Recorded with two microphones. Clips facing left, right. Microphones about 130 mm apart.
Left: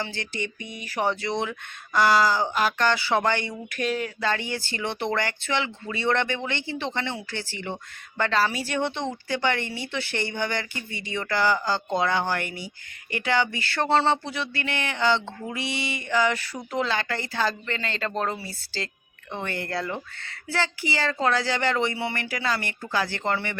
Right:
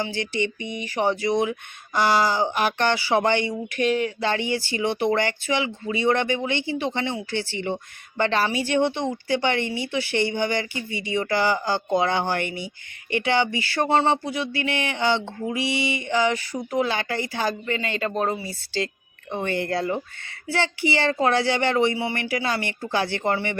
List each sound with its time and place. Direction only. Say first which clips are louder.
0.0 s speech: right 6 dB; 20° right (ahead or behind)
3.7 s a sound: right 4 dB; 40° left (ahead or behind)
4.2 s speech: right 3 dB; 20° right (ahead or behind)